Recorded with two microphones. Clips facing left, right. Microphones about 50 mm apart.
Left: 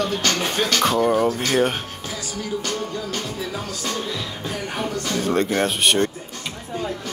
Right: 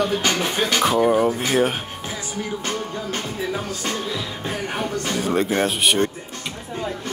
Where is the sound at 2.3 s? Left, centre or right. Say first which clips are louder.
Even; right.